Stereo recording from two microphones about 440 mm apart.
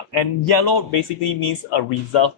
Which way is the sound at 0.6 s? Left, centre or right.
Left.